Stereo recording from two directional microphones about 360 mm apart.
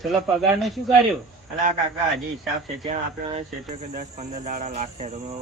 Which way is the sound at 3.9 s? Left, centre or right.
Centre.